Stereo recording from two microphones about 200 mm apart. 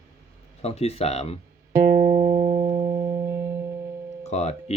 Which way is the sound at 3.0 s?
20° right (ahead or behind).